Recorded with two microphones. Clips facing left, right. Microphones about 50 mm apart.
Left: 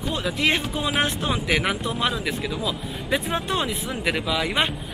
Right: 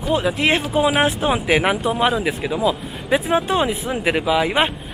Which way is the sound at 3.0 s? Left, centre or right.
Centre.